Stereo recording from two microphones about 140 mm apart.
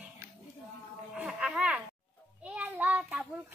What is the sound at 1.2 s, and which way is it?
A child's voice, 5° right (ahead or behind).